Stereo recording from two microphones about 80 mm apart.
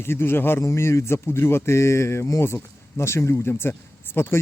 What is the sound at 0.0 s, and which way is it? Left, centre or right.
Speech, left.